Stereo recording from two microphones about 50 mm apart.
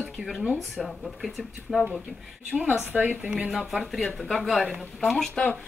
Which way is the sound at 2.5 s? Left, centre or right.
Right.